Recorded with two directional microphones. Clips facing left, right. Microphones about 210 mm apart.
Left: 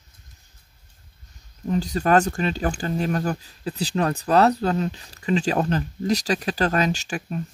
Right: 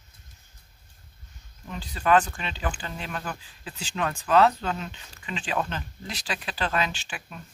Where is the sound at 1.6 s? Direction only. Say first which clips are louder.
Left 4 dB; 40° left (ahead or behind).